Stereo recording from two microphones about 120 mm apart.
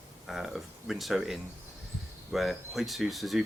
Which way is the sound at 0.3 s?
Centre (ahead or behind).